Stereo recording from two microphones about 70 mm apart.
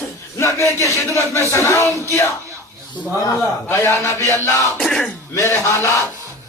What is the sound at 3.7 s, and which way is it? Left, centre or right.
Speech, left.